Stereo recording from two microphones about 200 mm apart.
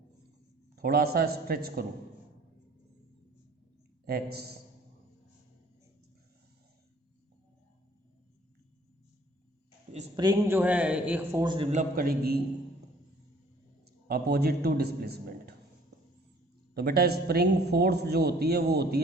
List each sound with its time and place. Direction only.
0.8 s a man's voice: 50° right (ahead or behind)
4.0 s a man's voice: 50° right (ahead or behind)
10.2 s a man's voice: 20° right (ahead or behind)
10.6 s a man's voice: 5° right (ahead or behind); by 12.4 s 50° right (ahead or behind)
14.1 s a man's voice: 50° right (ahead or behind)
16.7 s a man's voice: 50° right (ahead or behind)